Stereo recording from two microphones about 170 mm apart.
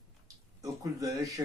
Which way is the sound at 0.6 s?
20° right (ahead or behind).